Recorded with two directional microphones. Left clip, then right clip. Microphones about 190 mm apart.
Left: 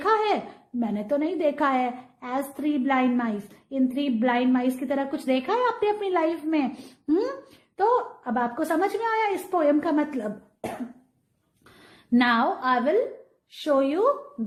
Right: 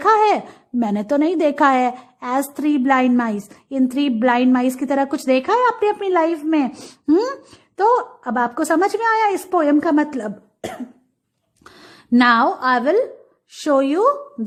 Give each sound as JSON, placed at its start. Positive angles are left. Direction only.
{"t": 0.0, "sound": "a sound", "side_deg": -40}
{"t": 0.8, "sound": "a woman's voice", "side_deg": -45}
{"t": 7.1, "sound": "a woman's voice", "side_deg": -50}
{"t": 12.1, "sound": "a woman's voice", "side_deg": -45}